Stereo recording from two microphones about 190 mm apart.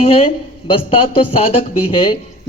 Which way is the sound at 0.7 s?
30° left (ahead or behind).